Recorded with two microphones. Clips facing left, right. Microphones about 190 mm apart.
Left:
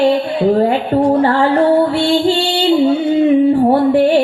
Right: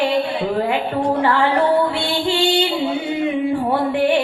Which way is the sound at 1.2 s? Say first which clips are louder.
Left 5 dB; 40° left (ahead or behind).